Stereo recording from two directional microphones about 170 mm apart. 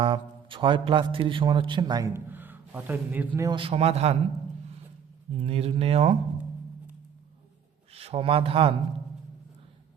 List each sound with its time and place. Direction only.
0.0 s a man's voice: 30° right (ahead or behind); by 3.4 s 10° right (ahead or behind)
3.4 s speech: 30° right (ahead or behind)
5.4 s speech: 35° right (ahead or behind)
7.9 s speech: 35° right (ahead or behind)